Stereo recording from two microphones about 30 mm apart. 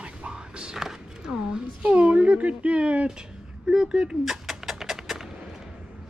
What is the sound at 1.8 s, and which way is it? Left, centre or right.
Speech, right.